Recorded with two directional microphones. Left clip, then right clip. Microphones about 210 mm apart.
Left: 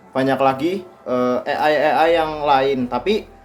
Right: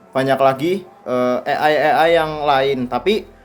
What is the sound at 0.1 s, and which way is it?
Speech, 35° right (ahead or behind).